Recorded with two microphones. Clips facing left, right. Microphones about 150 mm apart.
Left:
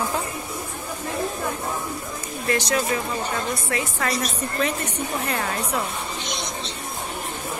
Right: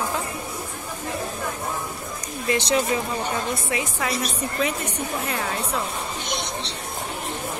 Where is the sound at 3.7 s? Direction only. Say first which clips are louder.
Left 2 dB; 15° right (ahead or behind).